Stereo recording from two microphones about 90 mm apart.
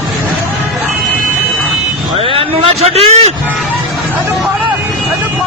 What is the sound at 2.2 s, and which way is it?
Vehicle, 90° right.